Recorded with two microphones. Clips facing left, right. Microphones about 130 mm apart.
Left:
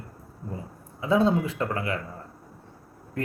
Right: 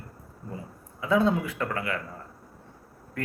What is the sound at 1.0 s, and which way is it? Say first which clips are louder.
Speech: left 1 dB; 25° left (ahead or behind).